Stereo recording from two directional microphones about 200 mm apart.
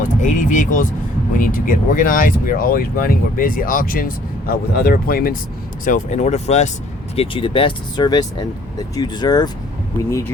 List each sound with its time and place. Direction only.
0.0 s speech: 40° left (ahead or behind); by 10.3 s 15° left (ahead or behind)